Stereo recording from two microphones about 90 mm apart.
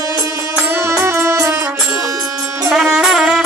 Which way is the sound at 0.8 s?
30° right (ahead or behind).